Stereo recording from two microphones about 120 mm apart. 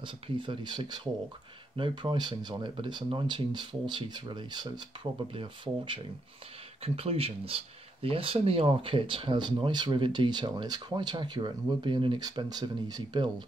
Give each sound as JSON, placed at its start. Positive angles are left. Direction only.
{"t": 0.0, "sound": "speech", "side_deg": -45}